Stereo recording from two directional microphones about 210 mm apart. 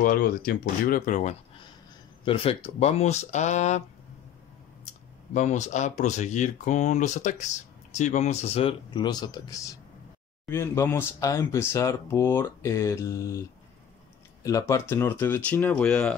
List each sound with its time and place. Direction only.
0.0 s speech: 45° left (ahead or behind)
2.2 s speech: 25° left (ahead or behind)
5.3 s speech: 35° left (ahead or behind); by 16.2 s 5° left (ahead or behind)